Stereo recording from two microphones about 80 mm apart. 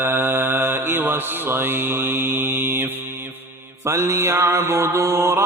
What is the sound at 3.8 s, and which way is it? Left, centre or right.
Mantra, right.